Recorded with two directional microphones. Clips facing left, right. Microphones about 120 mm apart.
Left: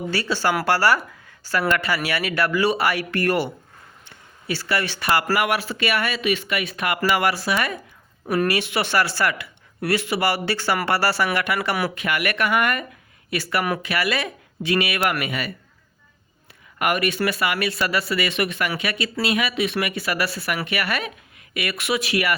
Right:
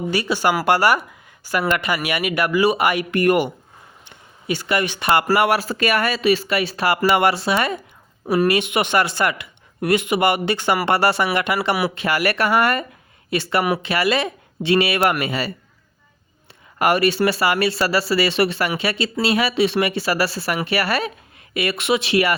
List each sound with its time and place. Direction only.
0.1 s speech: 15° right (ahead or behind); by 15.5 s 30° right (ahead or behind)
16.7 s speech: 30° right (ahead or behind)